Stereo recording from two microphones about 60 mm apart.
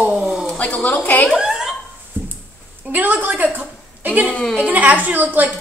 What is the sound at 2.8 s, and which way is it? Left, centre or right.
Speech, right.